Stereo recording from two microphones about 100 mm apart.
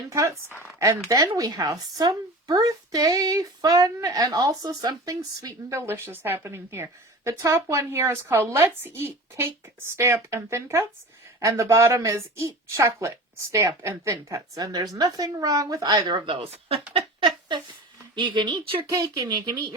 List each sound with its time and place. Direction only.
0.1 s a woman's voice: 30° right (ahead or behind); by 16.8 s 75° right (ahead or behind)
16.9 s a sound: 55° right (ahead or behind)
18.1 s speech: 50° right (ahead or behind)
18.9 s speech: 40° right (ahead or behind)